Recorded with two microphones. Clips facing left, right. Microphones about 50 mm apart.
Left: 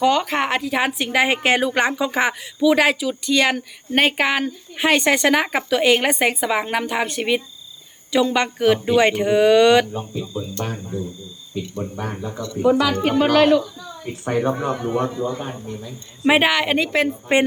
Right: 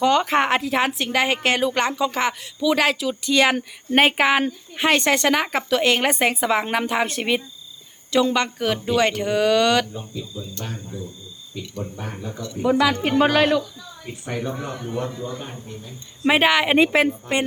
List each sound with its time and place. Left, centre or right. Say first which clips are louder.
0.0 s a woman's voice: even; centre
9.9 s speech: left 6 dB; left
10.6 s speech: left 6 dB; left
11.9 s speech: left 4 dB; left
12.8 s speech: even; centre
14.3 s speech: left 7 dB; left
14.7 s speech: left 6 dB; left
15.3 s speech: left 5 dB; left
16.2 s a woman's voice: left 1 dB; centre
16.6 s a woman's voice: right 3 dB; centre
17.3 s speech: left 9 dB; centre